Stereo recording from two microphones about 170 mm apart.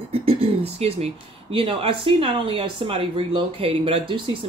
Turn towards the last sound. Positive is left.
turn(degrees=-30)  # may be behind; listen again after turning